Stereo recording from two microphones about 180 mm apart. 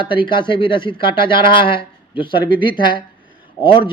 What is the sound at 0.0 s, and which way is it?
Speech, 25° left (ahead or behind).